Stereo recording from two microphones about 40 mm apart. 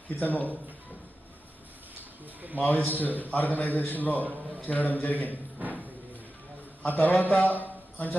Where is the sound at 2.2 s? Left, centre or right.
Right.